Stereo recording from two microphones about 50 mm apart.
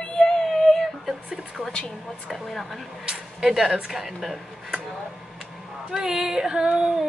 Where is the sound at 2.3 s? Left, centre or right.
Centre.